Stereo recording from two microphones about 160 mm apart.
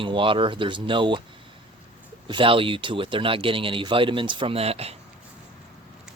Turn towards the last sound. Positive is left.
turn(degrees=-40)  # may be behind; listen again after turning